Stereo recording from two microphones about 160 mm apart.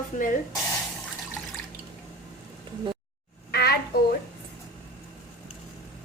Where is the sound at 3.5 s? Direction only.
85° left.